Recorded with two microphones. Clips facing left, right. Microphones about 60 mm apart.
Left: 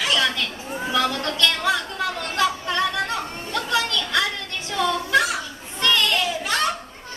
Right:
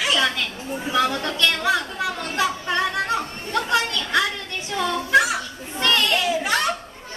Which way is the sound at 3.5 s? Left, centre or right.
Centre.